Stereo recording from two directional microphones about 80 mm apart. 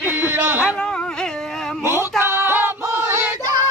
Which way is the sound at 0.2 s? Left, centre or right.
Right.